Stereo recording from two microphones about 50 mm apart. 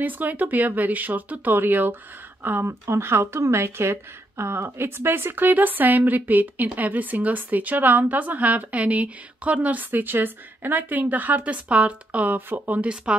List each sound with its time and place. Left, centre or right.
0.0 s a woman's voice: right
2.6 s speech: right
5.3 s a woman's voice: right
12.4 s a woman's voice: right